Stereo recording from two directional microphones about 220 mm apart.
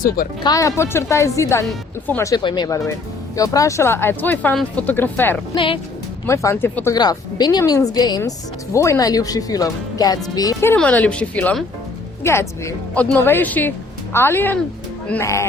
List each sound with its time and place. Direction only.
0.4 s speech: 15° left (ahead or behind)
5.5 s speech: 20° left (ahead or behind)